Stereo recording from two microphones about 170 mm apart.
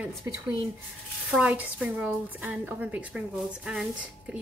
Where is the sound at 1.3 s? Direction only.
5° right (ahead or behind).